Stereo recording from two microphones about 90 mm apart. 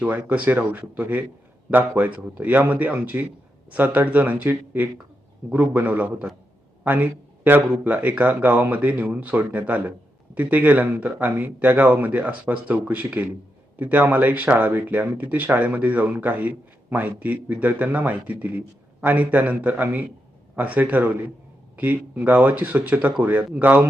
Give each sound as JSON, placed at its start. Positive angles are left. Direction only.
{"t": 0.3, "sound": "a man's voice", "side_deg": -20}